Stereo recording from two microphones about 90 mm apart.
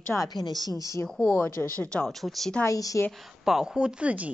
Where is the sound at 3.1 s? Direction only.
Centre (ahead or behind).